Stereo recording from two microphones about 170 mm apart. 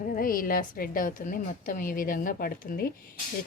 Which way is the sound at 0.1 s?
55° left (ahead or behind).